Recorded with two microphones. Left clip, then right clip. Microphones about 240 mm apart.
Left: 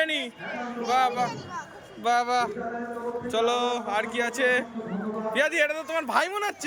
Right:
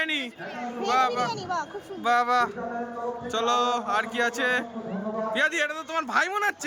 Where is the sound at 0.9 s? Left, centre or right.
Centre.